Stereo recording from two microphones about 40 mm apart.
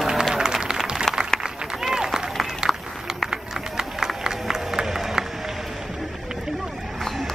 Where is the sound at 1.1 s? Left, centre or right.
Centre.